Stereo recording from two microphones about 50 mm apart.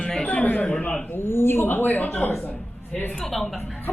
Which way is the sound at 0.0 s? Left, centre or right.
Centre.